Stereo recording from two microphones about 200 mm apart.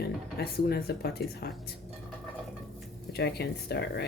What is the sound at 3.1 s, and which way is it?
Speech, 55° left (ahead or behind).